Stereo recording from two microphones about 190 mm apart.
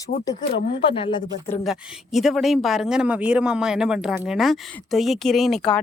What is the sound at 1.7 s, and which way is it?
Speech, centre (ahead or behind).